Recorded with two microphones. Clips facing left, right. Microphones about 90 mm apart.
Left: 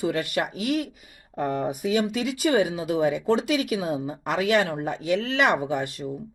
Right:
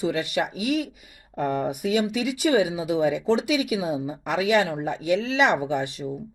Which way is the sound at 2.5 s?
50° left (ahead or behind).